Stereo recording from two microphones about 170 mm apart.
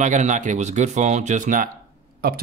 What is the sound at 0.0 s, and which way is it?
Speech, 45° right (ahead or behind).